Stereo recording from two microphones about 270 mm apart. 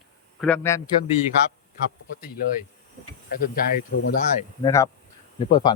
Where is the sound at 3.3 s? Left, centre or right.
Left.